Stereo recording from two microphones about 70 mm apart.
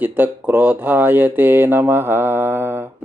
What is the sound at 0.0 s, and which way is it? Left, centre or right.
Speech, right.